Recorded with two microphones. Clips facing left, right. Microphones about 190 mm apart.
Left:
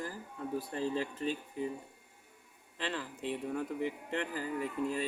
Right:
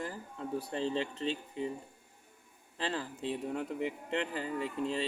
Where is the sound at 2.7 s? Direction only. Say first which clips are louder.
Right 2 dB; 35° right (ahead or behind).